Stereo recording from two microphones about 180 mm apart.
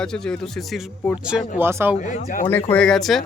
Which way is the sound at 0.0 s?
5° left (ahead or behind).